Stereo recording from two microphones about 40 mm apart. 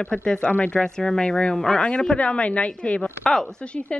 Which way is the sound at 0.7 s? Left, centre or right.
Centre.